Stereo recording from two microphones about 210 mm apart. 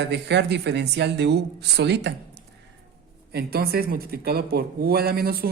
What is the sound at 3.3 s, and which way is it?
Speech, 50° right (ahead or behind).